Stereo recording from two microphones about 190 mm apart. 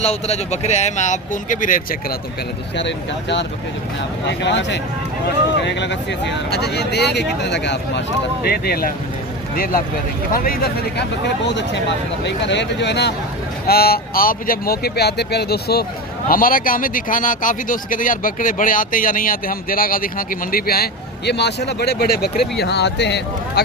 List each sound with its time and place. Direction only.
0.0 s speech: 35° left (ahead or behind)
2.7 s speech: 70° left (ahead or behind); by 8.9 s 55° left (ahead or behind)
10.3 s speech: 50° left (ahead or behind)
11.4 s speech: 65° left (ahead or behind)